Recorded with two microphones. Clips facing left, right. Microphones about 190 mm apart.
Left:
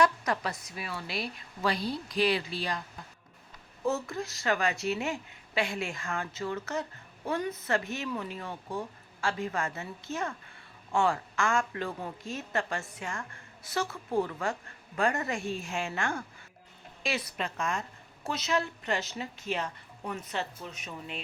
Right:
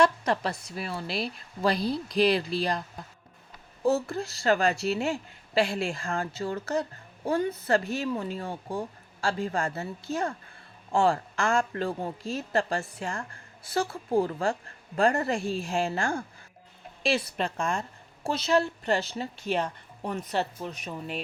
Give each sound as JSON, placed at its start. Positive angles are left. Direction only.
{"t": 0.0, "sound": "a woman's voice", "side_deg": -30}
{"t": 3.8, "sound": "a woman's voice", "side_deg": -35}